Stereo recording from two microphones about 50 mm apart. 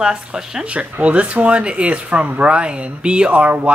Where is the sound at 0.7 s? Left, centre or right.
Right.